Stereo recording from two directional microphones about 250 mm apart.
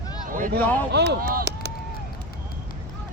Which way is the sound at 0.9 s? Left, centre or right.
Right.